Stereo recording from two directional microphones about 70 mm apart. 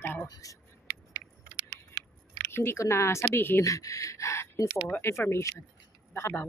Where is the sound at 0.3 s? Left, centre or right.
Left.